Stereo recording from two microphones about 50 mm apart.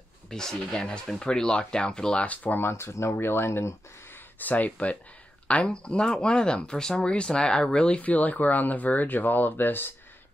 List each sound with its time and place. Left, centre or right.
0.3 s speech: centre
2.1 s speech: left
2.6 s speech: left
4.4 s speech: left
8.0 s speech: left